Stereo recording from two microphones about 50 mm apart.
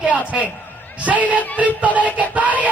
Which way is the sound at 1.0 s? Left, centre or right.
Right.